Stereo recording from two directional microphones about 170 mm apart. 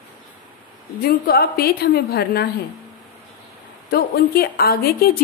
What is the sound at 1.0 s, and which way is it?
A woman's voice, 60° left (ahead or behind).